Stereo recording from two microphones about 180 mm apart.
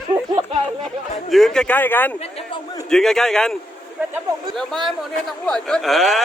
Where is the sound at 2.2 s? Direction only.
35° left (ahead or behind).